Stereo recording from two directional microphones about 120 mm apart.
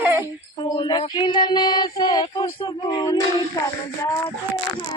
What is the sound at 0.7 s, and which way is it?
Child singing, 40° left (ahead or behind).